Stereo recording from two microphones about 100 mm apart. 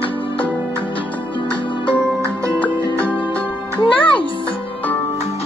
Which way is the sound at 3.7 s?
55° left (ahead or behind).